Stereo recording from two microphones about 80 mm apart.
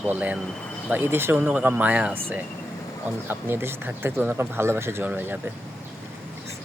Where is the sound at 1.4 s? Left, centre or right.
Centre.